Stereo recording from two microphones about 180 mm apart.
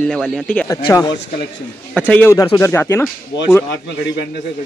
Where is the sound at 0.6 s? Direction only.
20° left (ahead or behind).